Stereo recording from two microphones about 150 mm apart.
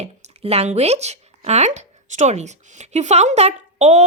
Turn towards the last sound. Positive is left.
turn(degrees=-45)  # may be behind; listen again after turning